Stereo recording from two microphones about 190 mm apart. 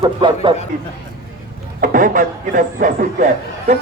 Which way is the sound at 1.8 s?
45° right (ahead or behind).